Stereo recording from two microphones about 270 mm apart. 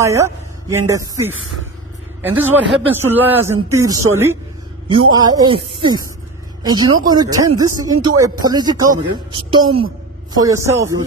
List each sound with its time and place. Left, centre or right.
0.0 s a woman's voice: centre